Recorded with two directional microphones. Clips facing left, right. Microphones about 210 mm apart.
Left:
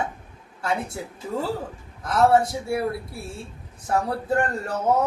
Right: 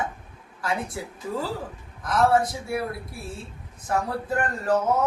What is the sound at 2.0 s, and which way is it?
Speech, 25° left (ahead or behind).